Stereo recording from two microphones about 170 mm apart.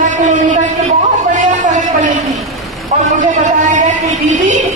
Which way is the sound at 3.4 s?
45° right (ahead or behind).